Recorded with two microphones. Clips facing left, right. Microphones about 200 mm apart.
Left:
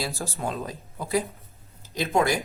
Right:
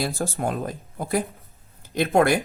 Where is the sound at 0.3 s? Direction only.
50° right (ahead or behind).